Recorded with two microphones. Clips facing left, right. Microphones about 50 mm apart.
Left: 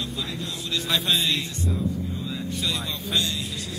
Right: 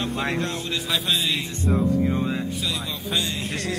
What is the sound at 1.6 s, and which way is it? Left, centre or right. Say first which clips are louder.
Music: right 10 dB; right.